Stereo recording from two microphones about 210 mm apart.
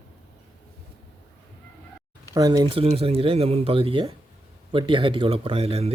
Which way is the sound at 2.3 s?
15° right (ahead or behind).